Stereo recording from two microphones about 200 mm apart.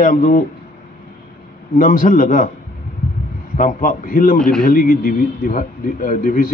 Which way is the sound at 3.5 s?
40° left (ahead or behind).